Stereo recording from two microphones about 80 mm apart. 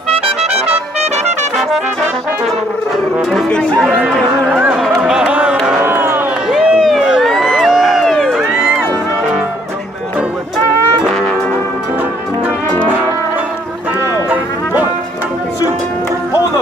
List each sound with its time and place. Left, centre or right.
3.4 s speech: centre
3.8 s chatter: centre
5.0 s music: centre
5.8 s a sound: right
6.5 s a sound: centre
6.9 s crowd: centre
14.3 s music: right